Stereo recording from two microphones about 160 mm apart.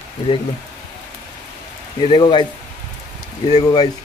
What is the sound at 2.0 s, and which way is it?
Speech, 30° left (ahead or behind).